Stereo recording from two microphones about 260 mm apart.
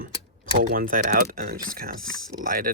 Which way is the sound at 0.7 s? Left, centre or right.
Right.